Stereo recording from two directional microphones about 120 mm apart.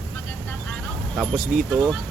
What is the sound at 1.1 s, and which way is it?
Speech, centre (ahead or behind).